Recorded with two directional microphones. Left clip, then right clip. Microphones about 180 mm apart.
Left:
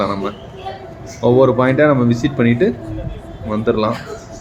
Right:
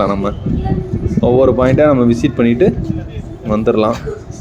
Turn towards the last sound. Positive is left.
turn(degrees=-20)  # may be behind; listen again after turning